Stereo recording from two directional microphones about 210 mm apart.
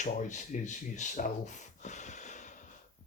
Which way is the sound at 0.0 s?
35° left (ahead or behind).